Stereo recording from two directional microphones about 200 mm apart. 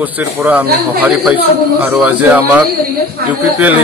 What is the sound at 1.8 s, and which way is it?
Speech, 10° right (ahead or behind).